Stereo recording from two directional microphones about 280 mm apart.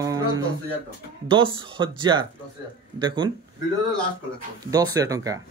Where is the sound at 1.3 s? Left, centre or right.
Centre.